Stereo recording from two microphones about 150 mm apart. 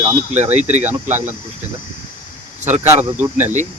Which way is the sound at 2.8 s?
15° right (ahead or behind).